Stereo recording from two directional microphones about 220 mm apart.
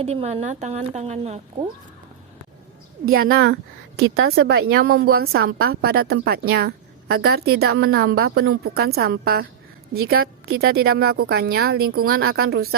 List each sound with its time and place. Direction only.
0.0 s a woman's voice: 30° right (ahead or behind)
3.3 s a woman's voice: 45° right (ahead or behind)